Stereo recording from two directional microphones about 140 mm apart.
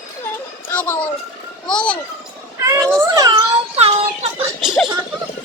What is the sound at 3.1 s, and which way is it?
Cat, 30° right (ahead or behind).